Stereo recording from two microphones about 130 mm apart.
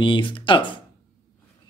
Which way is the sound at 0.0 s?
40° left (ahead or behind).